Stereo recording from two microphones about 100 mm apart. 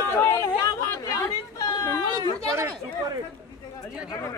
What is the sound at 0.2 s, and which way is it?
Chatter, 25° left (ahead or behind).